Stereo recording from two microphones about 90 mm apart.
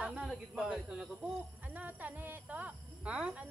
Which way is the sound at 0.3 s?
10° right (ahead or behind).